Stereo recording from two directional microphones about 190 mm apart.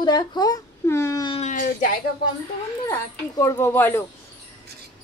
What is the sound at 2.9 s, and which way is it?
Speech, 15° left (ahead or behind).